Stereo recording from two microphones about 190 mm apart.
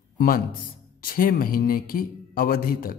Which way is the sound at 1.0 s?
50° left (ahead or behind).